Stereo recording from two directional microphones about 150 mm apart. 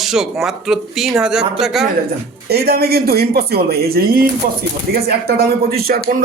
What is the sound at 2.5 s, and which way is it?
Speech, 90° right.